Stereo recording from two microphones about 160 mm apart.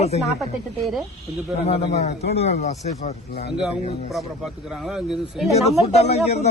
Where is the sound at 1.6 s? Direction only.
40° left (ahead or behind).